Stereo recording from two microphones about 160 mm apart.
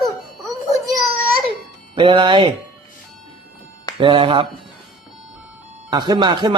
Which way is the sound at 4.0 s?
30° right (ahead or behind).